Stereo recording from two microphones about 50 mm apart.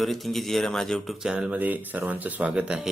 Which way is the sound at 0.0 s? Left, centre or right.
Centre.